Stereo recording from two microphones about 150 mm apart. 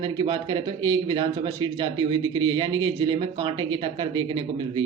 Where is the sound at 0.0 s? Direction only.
35° right (ahead or behind).